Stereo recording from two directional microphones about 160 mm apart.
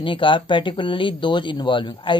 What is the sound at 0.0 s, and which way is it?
Speech, 30° left (ahead or behind).